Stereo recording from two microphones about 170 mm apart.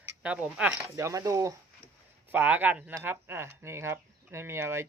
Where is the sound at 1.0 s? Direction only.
20° right (ahead or behind).